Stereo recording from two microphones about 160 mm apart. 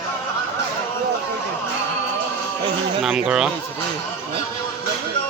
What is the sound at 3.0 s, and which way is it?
Speech, 5° right (ahead or behind).